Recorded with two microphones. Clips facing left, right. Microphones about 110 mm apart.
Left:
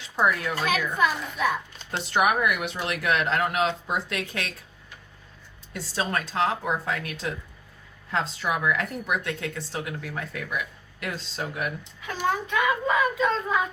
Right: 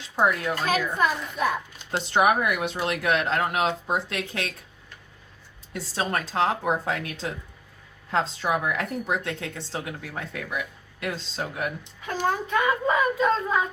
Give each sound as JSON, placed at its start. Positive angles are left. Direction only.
{"t": 0.6, "sound": "child singing", "side_deg": -35}
{"t": 2.0, "sound": "a woman's voice", "side_deg": -25}
{"t": 5.7, "sound": "child singing", "side_deg": -30}
{"t": 6.3, "sound": "a woman's voice", "side_deg": -30}
{"t": 12.0, "sound": "child singing", "side_deg": -40}